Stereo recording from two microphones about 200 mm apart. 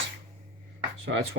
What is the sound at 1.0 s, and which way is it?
Speech, 60° right (ahead or behind).